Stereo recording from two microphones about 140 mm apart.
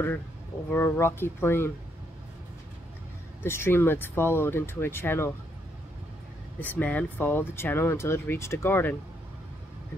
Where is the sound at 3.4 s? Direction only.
15° left (ahead or behind).